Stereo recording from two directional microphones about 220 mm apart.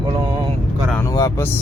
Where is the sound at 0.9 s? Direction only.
15° left (ahead or behind).